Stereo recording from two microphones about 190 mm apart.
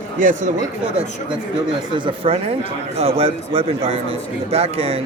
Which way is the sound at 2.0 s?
30° right (ahead or behind).